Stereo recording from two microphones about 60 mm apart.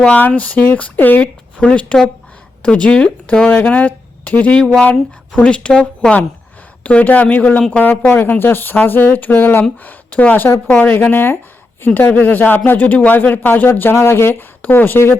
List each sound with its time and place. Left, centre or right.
0.0 s a woman's voice: left
6.8 s speech: left
9.8 s speech: left
11.0 s speech: left